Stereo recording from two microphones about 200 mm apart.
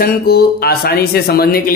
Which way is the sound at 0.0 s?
50° left (ahead or behind).